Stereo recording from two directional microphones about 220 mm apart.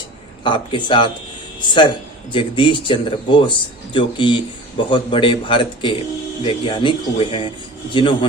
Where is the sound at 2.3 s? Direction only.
25° left (ahead or behind).